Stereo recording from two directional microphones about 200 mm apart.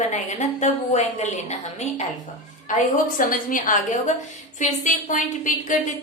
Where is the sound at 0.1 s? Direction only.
35° left (ahead or behind).